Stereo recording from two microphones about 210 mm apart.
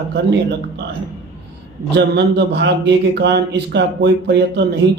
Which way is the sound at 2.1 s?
55° right (ahead or behind).